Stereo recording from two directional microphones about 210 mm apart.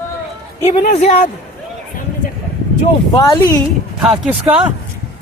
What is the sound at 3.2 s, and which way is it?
Speech, 20° left (ahead or behind).